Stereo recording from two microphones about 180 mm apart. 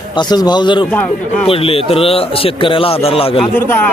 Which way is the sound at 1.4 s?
30° left (ahead or behind).